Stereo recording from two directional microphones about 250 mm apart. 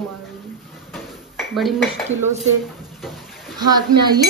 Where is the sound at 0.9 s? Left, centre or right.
Centre.